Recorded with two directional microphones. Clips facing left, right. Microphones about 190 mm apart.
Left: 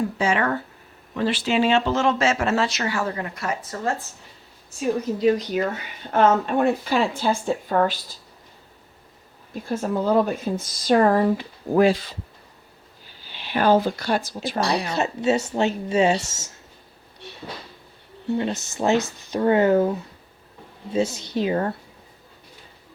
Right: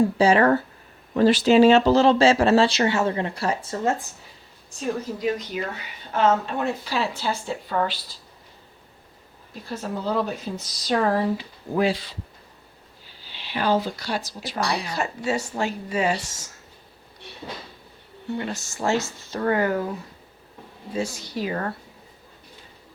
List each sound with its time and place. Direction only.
0.2 s speech: 35° right (ahead or behind)
5.1 s speech: 20° left (ahead or behind)
5.5 s speech: 45° left (ahead or behind)
6.1 s speech: 55° left (ahead or behind)
9.6 s speech: 50° left (ahead or behind)
13.3 s speech: 50° left (ahead or behind)
14.7 s speech: 25° left (ahead or behind)
18.3 s speech: 20° left (ahead or behind)
20.9 s speech: 20° left (ahead or behind)